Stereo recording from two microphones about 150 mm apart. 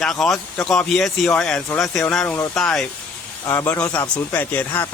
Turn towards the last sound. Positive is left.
turn(degrees=10)  # may be behind; listen again after turning